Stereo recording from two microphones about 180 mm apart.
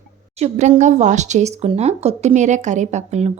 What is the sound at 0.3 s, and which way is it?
Speech, 35° right (ahead or behind).